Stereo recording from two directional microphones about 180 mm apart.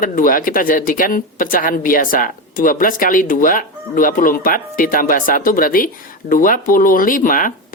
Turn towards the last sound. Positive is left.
turn(degrees=50)  # may be behind; listen again after turning